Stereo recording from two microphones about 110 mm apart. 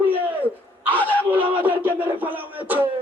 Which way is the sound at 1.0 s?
15° left (ahead or behind).